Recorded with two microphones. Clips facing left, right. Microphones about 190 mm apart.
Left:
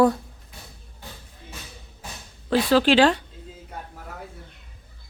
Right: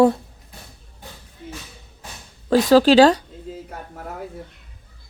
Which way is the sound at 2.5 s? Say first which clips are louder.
Right 5 dB; 40° right (ahead or behind).